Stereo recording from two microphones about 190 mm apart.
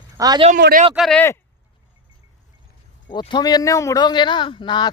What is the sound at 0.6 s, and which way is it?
Speech, 70° right (ahead or behind).